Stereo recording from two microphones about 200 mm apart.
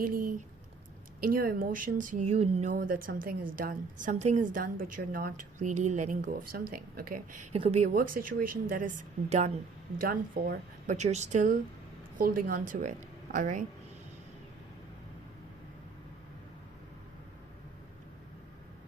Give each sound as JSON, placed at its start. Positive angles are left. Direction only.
{"t": 0.0, "sound": "speech", "side_deg": -45}
{"t": 7.5, "sound": "speech", "side_deg": -30}
{"t": 7.9, "sound": "speech", "side_deg": -45}
{"t": 10.0, "sound": "a woman's voice", "side_deg": -45}